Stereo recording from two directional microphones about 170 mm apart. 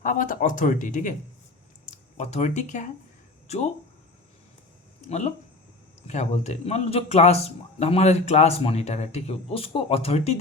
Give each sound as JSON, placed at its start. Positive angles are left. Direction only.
{"t": 0.0, "sound": "a man's voice", "side_deg": 50}
{"t": 5.0, "sound": "a man's voice", "side_deg": 40}